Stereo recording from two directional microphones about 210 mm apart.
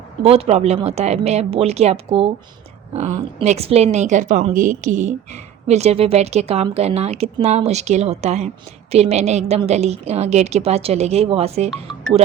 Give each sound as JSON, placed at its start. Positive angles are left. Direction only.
{"t": 0.2, "sound": "a woman's voice", "side_deg": -30}
{"t": 3.4, "sound": "a woman's voice", "side_deg": -30}